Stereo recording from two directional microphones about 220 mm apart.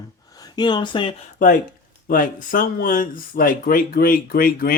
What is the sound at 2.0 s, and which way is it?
Speech, 40° left (ahead or behind).